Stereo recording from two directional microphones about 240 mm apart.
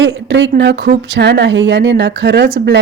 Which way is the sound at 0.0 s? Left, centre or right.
Right.